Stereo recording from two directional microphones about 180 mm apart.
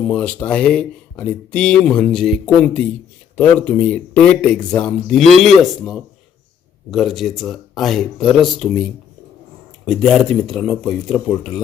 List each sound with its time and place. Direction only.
0.0 s speech: 5° left (ahead or behind)